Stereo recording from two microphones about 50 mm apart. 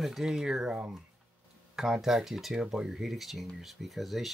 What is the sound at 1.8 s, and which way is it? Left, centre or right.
Speech, centre.